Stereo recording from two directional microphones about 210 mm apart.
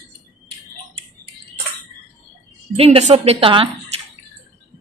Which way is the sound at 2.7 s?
30° right (ahead or behind).